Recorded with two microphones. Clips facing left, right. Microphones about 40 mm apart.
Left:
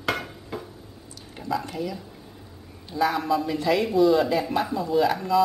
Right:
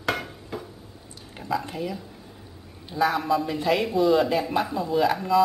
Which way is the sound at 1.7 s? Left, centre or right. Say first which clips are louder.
Even; centre.